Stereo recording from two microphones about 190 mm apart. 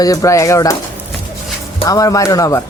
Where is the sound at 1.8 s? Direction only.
20° left (ahead or behind).